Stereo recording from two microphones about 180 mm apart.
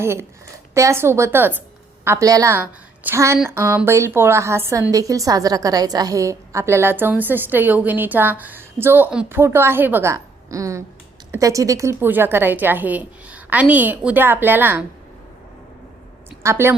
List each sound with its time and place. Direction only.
0.0 s a woman's voice: 15° right (ahead or behind)
16.4 s a woman's voice: 15° right (ahead or behind)